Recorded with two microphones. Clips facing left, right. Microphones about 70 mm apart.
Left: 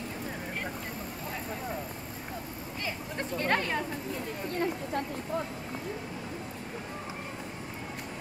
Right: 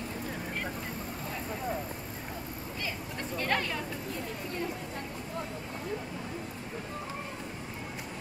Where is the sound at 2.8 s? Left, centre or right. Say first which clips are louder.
Left 3 dB; left.